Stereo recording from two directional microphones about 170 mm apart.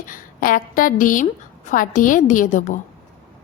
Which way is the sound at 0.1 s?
55° left (ahead or behind).